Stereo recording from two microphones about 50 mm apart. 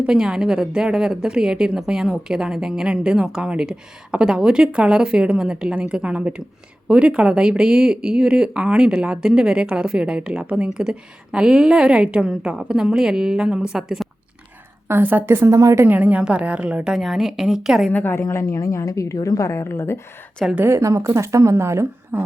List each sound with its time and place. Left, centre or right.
0.0 s a woman's voice: centre
14.8 s a woman's voice: right
15.5 s a woman's voice: right
15.9 s a woman's voice: right; by 17.8 s centre
18.2 s a woman's voice: left
20.7 s speech: right
22.1 s a woman's voice: right